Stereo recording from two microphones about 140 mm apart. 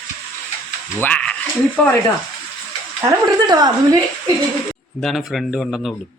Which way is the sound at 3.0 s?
25° right (ahead or behind).